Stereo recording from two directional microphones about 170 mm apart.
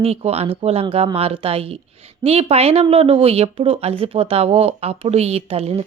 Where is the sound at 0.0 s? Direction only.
35° right (ahead or behind).